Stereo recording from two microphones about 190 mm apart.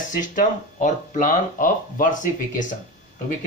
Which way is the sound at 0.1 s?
45° left (ahead or behind).